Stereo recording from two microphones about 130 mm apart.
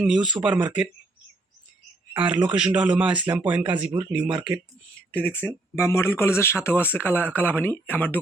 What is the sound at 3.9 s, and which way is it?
Speech, 40° right (ahead or behind).